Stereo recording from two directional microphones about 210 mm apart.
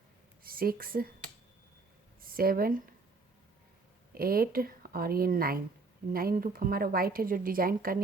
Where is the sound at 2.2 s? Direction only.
45° right (ahead or behind).